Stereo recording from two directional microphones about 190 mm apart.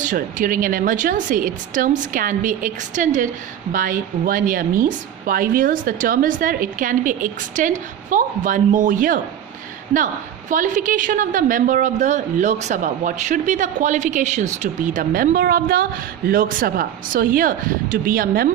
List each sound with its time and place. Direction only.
0.0 s a woman's voice: 45° right (ahead or behind)
10.5 s a woman's voice: 40° right (ahead or behind)